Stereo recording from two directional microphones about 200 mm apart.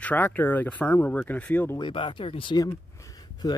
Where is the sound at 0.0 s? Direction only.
10° left (ahead or behind).